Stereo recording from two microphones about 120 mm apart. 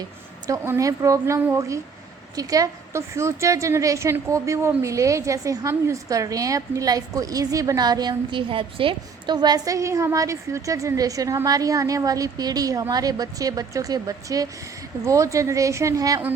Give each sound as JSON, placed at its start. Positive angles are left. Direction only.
{"t": 0.6, "sound": "a woman's voice", "side_deg": -25}